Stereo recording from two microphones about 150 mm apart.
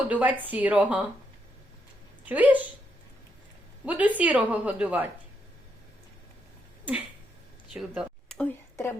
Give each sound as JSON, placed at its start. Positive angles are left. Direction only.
{"t": 0.1, "sound": "a woman's voice", "side_deg": -10}
{"t": 2.2, "sound": "speech", "side_deg": -10}
{"t": 3.8, "sound": "a woman's voice", "side_deg": -10}
{"t": 7.7, "sound": "a sound", "side_deg": -5}
{"t": 8.4, "sound": "speech", "side_deg": 15}